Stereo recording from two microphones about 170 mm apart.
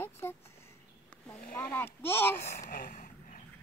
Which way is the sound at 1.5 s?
10° left (ahead or behind).